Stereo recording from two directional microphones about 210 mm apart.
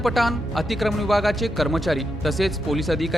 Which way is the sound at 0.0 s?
Centre (ahead or behind).